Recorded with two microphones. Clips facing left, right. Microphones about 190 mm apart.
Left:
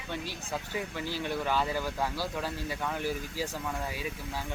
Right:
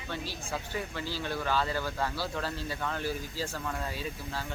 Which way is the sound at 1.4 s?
15° left (ahead or behind).